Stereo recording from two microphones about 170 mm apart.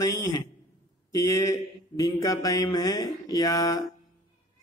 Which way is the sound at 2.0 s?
20° left (ahead or behind).